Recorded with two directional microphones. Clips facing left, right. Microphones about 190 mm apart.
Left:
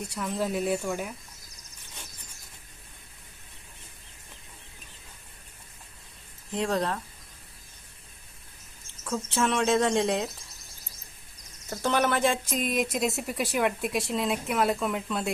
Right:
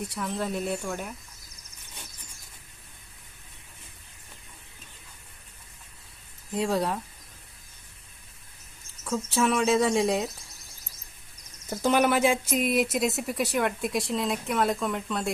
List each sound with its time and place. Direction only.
0.1 s speech: centre (ahead or behind)
6.5 s speech: 10° right (ahead or behind)
9.0 s speech: centre (ahead or behind)
11.7 s speech: 15° right (ahead or behind); by 15.3 s centre (ahead or behind)